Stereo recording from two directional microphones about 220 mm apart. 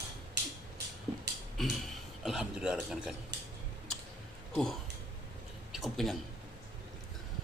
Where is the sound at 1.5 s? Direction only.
Centre (ahead or behind).